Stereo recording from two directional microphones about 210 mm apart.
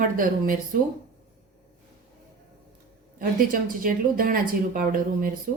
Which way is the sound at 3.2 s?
40° right (ahead or behind).